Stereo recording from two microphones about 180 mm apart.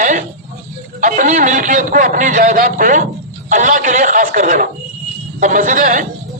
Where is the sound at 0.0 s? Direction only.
45° right (ahead or behind).